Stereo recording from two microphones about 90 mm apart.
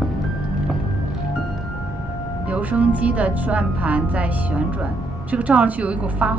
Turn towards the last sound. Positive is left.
turn(degrees=-15)  # may be behind; listen again after turning